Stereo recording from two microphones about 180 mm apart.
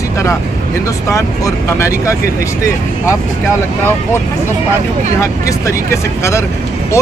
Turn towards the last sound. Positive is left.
turn(degrees=15)  # may be behind; listen again after turning